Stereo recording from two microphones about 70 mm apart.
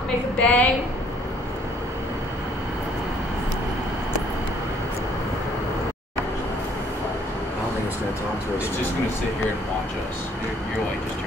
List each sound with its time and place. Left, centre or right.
0.4 s a woman's voice: left